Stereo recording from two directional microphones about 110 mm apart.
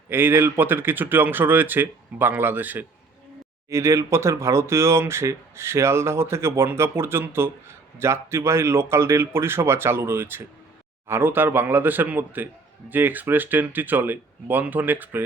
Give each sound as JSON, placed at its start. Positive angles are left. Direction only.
{"t": 0.1, "sound": "speech", "side_deg": -20}